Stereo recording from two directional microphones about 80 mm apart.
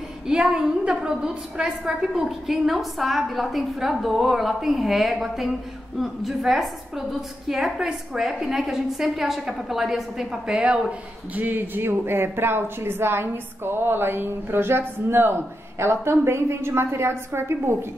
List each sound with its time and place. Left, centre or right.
0.3 s a woman's voice: centre
11.3 s a woman's voice: right